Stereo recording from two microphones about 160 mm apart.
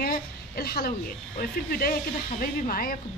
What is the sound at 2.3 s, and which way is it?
Speech, 65° left (ahead or behind).